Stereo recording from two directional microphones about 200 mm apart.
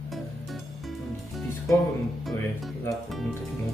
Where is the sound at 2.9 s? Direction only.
Centre (ahead or behind).